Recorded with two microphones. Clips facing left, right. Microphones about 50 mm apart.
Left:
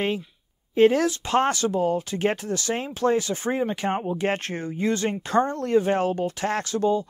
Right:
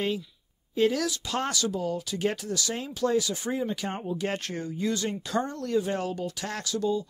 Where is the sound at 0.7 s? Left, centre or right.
Left.